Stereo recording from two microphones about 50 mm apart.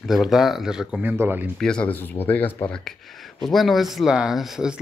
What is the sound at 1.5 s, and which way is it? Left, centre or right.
Speech, centre.